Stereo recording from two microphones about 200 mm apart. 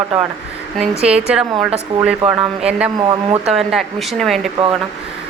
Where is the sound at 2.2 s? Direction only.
5° right (ahead or behind).